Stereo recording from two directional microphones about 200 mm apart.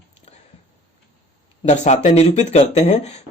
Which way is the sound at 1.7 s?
35° left (ahead or behind).